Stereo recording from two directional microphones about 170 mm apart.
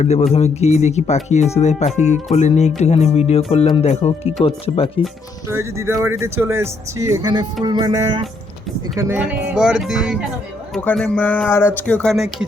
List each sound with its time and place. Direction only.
0.0 s speech: 40° left (ahead or behind)
5.5 s speech: 15° right (ahead or behind)
7.6 s music: 25° right (ahead or behind)
9.1 s music: 5° right (ahead or behind)
10.8 s speech: 10° left (ahead or behind)
12.1 s music: 5° right (ahead or behind)